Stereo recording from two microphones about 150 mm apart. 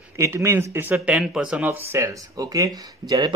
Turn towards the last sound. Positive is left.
turn(degrees=-25)  # may be behind; listen again after turning